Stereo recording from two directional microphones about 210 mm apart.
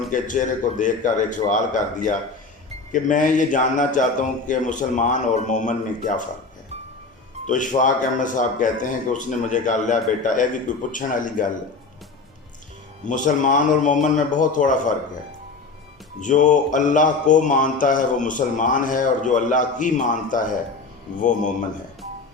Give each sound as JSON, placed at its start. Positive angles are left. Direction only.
{"t": 0.1, "sound": "mantra", "side_deg": 35}
{"t": 7.4, "sound": "mantra", "side_deg": 35}
{"t": 13.1, "sound": "mantra", "side_deg": 35}
{"t": 16.2, "sound": "mantra", "side_deg": 35}